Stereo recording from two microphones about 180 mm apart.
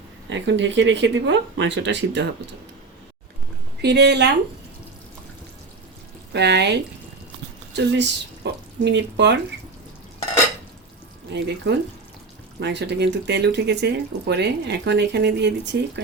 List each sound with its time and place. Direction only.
0.3 s speech: 90° right
3.8 s speech: 70° right (ahead or behind)
6.3 s speech: 70° right (ahead or behind)
11.3 s speech: 75° right (ahead or behind)